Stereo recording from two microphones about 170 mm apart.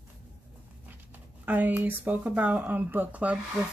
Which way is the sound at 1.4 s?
10° right (ahead or behind).